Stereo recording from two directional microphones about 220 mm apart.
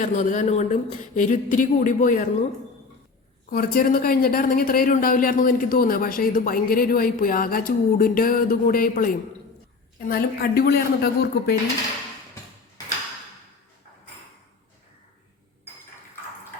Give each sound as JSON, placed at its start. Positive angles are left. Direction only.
{"t": 0.0, "sound": "speech", "side_deg": 35}
{"t": 3.5, "sound": "speech", "side_deg": 40}